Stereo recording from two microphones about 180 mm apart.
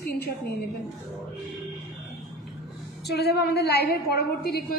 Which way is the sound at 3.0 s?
65° left (ahead or behind).